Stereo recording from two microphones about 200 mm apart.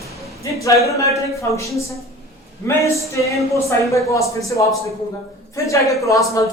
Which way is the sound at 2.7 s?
15° left (ahead or behind).